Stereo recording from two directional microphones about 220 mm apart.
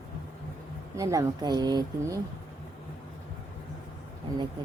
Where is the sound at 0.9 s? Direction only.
15° right (ahead or behind).